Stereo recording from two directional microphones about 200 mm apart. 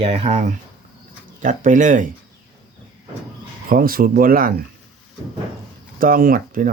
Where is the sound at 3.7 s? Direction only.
45° right (ahead or behind).